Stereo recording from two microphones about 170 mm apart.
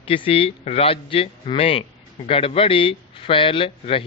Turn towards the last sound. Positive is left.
turn(degrees=30)  # may be behind; listen again after turning